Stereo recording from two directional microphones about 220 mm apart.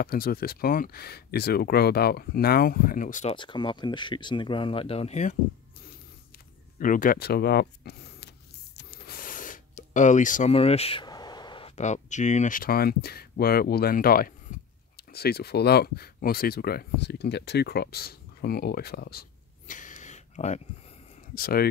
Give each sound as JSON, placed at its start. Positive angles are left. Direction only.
{"t": 0.0, "sound": "speech", "side_deg": 40}
{"t": 3.3, "sound": "speech", "side_deg": 20}
{"t": 6.8, "sound": "speech", "side_deg": 40}
{"t": 19.7, "sound": "a sound", "side_deg": 35}
{"t": 21.4, "sound": "speech", "side_deg": 45}